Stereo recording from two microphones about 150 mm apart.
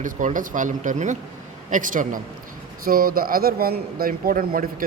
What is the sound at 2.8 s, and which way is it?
A man's voice, 75° right (ahead or behind).